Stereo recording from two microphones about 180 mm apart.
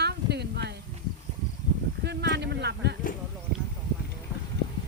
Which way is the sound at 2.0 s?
65° right (ahead or behind).